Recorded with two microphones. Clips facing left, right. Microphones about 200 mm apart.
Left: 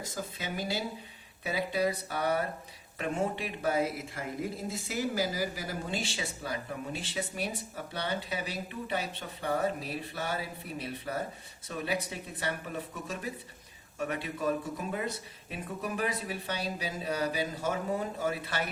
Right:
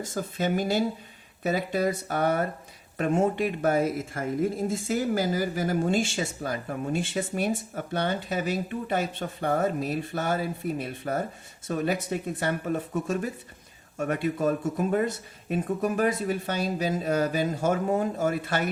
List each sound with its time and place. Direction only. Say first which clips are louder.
0.0 s speech: right 9 dB; 50° right (ahead or behind)